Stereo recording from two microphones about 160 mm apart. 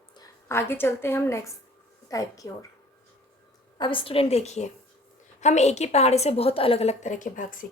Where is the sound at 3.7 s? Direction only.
30° left (ahead or behind).